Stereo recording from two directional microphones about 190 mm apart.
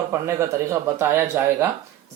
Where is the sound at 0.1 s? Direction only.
15° right (ahead or behind).